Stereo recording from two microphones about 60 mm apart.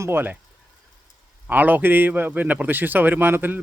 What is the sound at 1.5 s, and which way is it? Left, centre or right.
A man's voice, right.